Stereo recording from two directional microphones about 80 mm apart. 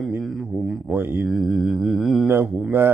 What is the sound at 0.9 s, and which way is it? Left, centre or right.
Mantra, right.